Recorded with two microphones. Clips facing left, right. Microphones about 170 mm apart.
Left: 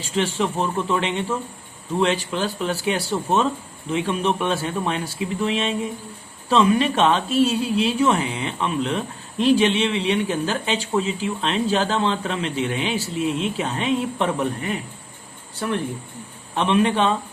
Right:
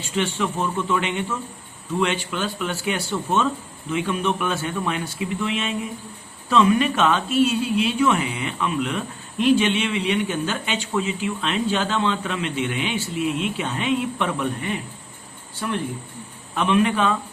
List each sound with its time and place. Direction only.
0.0 s speech: 35° left (ahead or behind)
16.6 s speech: 30° left (ahead or behind)